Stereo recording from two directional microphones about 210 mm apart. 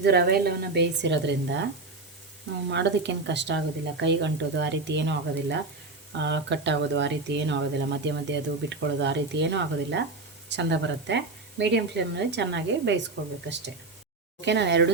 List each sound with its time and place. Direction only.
0.0 s a woman's voice: 50° right (ahead or behind)
2.6 s speech: 55° right (ahead or behind)
14.4 s speech: 55° right (ahead or behind)